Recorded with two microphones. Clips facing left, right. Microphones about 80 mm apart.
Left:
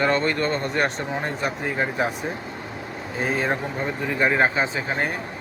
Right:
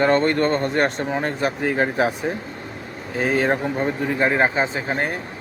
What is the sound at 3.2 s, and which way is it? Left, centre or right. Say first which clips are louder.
Speech: right 4 dB; right.